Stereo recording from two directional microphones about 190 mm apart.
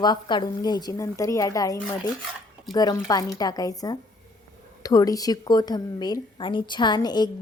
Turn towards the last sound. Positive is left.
turn(degrees=20)  # may be behind; listen again after turning